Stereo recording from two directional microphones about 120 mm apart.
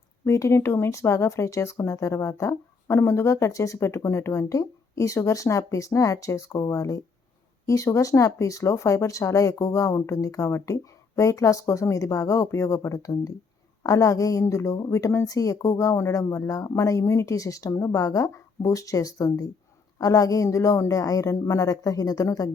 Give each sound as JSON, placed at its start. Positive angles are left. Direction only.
{"t": 0.3, "sound": "speech", "side_deg": 25}